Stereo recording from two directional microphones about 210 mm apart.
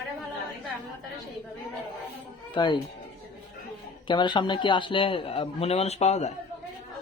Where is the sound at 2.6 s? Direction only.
20° left (ahead or behind).